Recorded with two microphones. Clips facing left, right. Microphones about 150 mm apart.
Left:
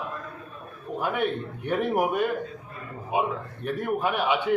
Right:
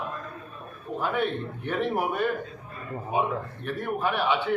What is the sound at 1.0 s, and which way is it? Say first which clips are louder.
A man's voice: left 1 dB; 15° left (ahead or behind).